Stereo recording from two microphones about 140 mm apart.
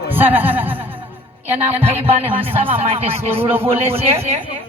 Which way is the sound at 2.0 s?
15° right (ahead or behind).